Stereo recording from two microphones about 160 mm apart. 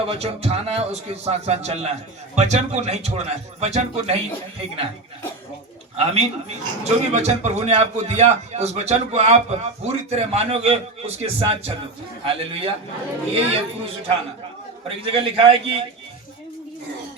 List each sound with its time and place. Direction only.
0.0 s a man's voice: 40° right (ahead or behind)
6.1 s a man's voice: 40° right (ahead or behind)